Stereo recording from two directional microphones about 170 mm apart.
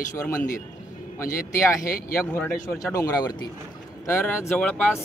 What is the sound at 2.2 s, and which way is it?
Speech, 10° left (ahead or behind).